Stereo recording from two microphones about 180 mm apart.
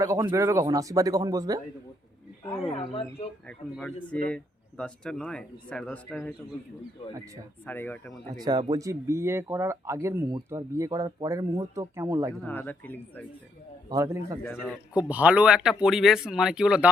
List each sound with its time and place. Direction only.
0.0 s speech: 15° right (ahead or behind)
2.6 s speech: 35° left (ahead or behind)
3.4 s speech: 5° left (ahead or behind)
7.6 s speech: 10° left (ahead or behind)
8.3 s speech: 20° right (ahead or behind)
12.3 s speech: 10° left (ahead or behind)
13.9 s speech: 15° right (ahead or behind)